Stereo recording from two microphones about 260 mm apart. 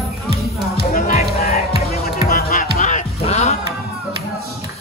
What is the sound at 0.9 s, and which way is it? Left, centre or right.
Music, left.